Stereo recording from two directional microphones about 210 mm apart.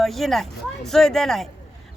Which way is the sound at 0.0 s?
Centre (ahead or behind).